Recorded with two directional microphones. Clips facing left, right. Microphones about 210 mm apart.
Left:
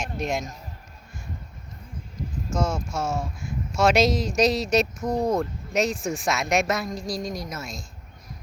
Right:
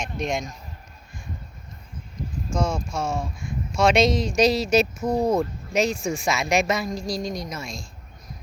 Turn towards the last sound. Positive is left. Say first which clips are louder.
# right 1 dB
turn(degrees=5)  # may be behind; listen again after turning